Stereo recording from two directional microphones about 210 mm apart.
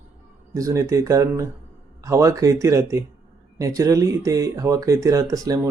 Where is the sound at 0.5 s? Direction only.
15° right (ahead or behind).